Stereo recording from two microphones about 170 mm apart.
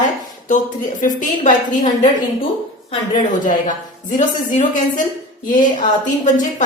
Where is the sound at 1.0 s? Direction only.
50° left (ahead or behind).